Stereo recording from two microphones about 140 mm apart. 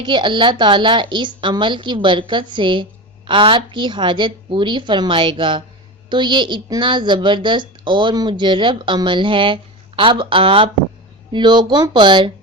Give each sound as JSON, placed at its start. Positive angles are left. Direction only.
{"t": 0.0, "sound": "a woman's voice", "side_deg": -35}